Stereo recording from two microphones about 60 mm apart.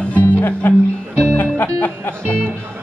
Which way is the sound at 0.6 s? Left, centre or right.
Left.